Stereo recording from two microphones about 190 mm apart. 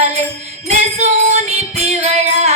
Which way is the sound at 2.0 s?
30° right (ahead or behind).